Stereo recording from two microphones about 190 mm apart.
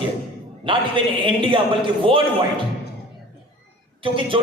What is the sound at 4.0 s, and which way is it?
Speech, 25° right (ahead or behind).